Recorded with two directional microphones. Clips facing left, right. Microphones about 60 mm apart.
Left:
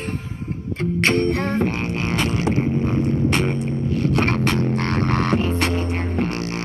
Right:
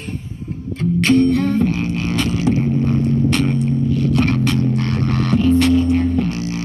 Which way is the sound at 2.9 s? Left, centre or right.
Left.